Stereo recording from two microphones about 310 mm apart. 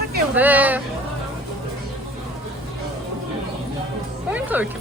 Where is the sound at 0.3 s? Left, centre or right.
Centre.